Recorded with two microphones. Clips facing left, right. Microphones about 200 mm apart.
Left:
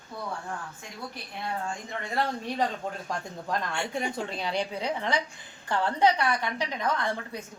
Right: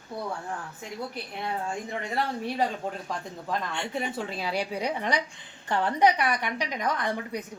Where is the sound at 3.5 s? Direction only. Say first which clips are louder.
Even; centre (ahead or behind).